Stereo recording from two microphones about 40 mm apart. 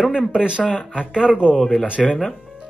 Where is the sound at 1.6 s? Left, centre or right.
Centre.